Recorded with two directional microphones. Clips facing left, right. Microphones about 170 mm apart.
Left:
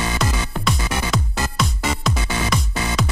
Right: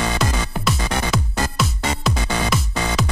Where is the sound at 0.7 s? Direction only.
Centre (ahead or behind).